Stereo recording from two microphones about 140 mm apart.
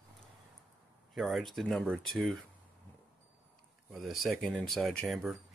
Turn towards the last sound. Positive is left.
turn(degrees=0)  # may be behind; listen again after turning